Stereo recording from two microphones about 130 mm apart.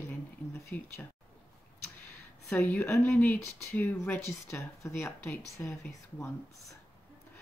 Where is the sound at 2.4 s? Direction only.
15° left (ahead or behind).